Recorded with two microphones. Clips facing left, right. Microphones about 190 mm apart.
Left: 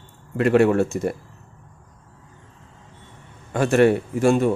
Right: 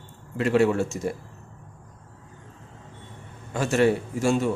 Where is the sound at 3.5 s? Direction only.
60° left (ahead or behind).